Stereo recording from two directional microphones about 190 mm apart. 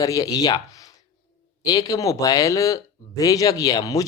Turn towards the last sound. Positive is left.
turn(degrees=20)  # may be behind; listen again after turning